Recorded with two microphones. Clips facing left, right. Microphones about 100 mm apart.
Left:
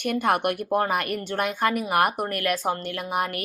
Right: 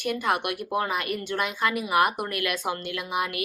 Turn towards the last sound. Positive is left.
turn(degrees=45)  # may be behind; listen again after turning